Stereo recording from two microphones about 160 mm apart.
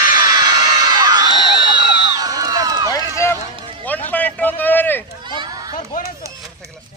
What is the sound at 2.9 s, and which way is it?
Run, 20° left (ahead or behind).